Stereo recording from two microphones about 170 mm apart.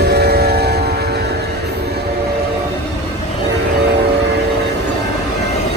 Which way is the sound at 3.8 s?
75° right (ahead or behind).